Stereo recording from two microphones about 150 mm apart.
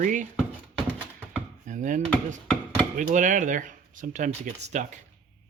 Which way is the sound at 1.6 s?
60° right (ahead or behind).